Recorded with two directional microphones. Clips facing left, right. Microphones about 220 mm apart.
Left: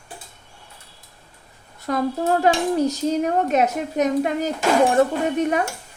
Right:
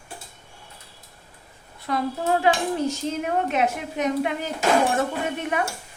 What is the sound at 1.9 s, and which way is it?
A woman's voice, 45° left (ahead or behind).